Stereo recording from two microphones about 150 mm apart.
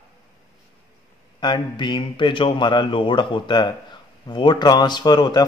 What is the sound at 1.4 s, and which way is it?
A man's voice, 30° left (ahead or behind).